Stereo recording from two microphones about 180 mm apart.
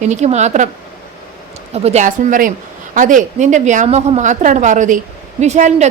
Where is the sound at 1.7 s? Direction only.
35° right (ahead or behind).